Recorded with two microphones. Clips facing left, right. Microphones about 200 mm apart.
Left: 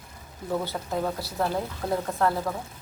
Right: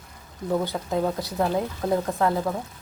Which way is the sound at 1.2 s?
20° right (ahead or behind).